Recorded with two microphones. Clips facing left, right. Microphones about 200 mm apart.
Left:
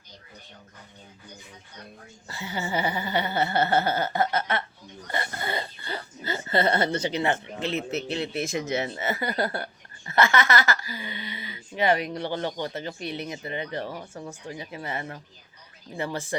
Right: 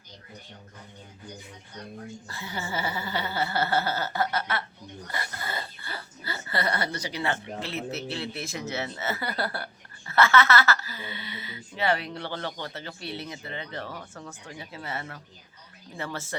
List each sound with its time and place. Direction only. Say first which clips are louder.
2.2 s speech: left 7 dB; 15° left (ahead or behind)